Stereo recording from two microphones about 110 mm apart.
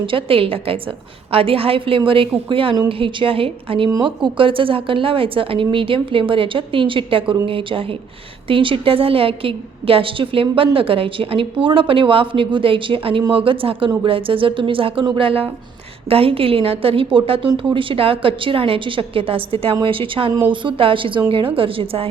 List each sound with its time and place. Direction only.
0.0 s a woman's voice: 55° right (ahead or behind)